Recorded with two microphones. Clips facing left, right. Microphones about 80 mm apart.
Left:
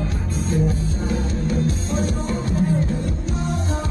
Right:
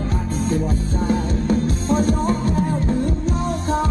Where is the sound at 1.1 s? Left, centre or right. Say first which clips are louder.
Right 5 dB; right.